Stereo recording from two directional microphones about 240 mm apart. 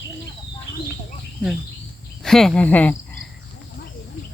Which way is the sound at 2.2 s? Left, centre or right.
Centre.